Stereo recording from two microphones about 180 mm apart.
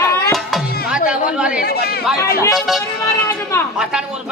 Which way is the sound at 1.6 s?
60° left (ahead or behind).